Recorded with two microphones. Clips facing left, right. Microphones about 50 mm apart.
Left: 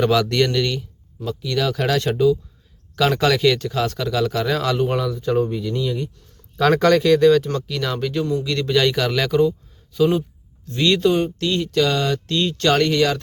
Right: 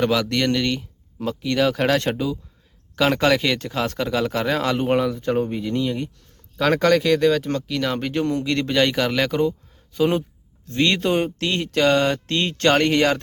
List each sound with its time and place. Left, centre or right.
0.0 s speech: centre
1.2 s speech: right
6.8 s speech: centre
7.9 s speech: right
8.2 s a man's voice: right
8.4 s speech: right
9.5 s a sound: right
10.8 s speech: right
11.1 s speech: right